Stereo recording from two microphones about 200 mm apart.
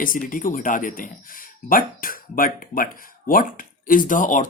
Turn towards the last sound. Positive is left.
turn(degrees=40)  # may be behind; listen again after turning